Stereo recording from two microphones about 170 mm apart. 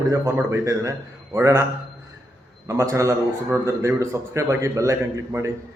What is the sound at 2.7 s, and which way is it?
A man's voice, 15° right (ahead or behind).